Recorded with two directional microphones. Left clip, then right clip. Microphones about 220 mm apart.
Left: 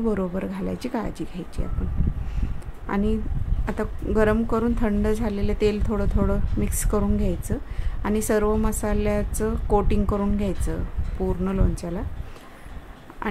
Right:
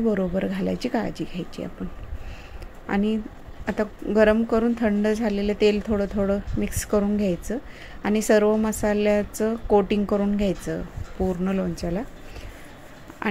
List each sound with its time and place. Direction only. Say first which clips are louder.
0.0 s a woman's voice: right 2 dB; centre (ahead or behind)
2.9 s a woman's voice: right 1 dB; 5° right (ahead or behind)
13.2 s a sound: right 2 dB; 5° right (ahead or behind)